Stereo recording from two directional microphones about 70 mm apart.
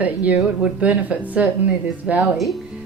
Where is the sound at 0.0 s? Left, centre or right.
Right.